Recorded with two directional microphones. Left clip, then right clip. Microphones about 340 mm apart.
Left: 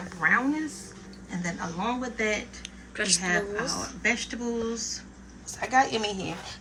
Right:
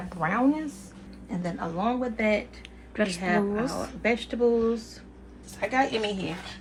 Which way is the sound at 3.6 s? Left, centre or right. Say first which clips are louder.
Right 1 dB; right.